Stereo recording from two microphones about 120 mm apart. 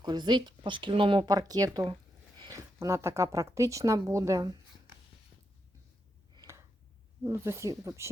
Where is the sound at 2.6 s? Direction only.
25° right (ahead or behind).